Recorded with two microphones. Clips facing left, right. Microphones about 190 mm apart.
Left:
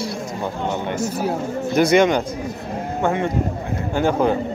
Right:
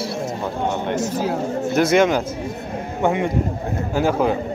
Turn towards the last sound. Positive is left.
turn(degrees=-5)  # may be behind; listen again after turning